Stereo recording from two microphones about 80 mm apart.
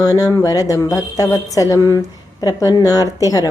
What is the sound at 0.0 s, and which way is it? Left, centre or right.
A woman's voice, left.